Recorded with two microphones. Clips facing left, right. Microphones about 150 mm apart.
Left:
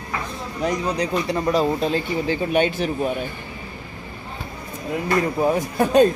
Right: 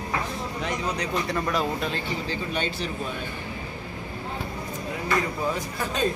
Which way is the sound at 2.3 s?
55° left (ahead or behind).